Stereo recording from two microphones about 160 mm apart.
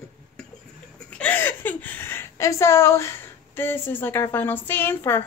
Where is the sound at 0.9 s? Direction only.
5° left (ahead or behind).